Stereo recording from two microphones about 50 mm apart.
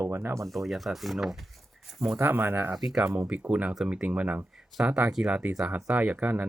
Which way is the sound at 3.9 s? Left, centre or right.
Right.